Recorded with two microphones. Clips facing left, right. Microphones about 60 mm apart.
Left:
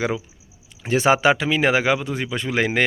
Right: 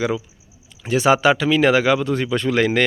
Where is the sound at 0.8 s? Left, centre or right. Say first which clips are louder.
Right 1 dB; left.